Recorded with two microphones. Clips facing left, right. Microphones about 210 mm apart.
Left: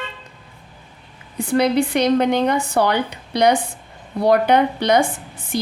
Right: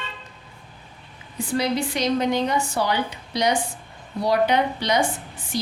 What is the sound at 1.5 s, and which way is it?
A woman's voice, 60° left (ahead or behind).